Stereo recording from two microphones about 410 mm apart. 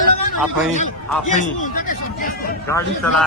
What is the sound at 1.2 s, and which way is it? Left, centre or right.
Speech, centre.